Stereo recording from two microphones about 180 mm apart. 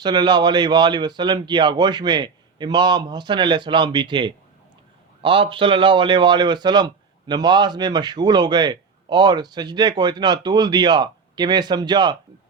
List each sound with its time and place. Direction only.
0.0 s a man's voice: 25° right (ahead or behind)